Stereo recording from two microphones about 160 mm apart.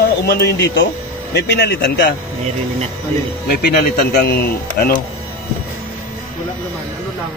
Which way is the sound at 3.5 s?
75° left (ahead or behind).